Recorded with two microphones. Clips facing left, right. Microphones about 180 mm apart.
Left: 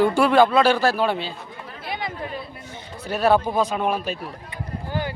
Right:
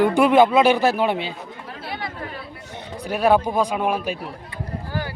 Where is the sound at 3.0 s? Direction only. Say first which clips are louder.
Right 1 dB; 15° right (ahead or behind).